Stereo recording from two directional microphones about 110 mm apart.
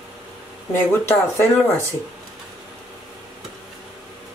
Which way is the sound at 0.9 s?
25° left (ahead or behind).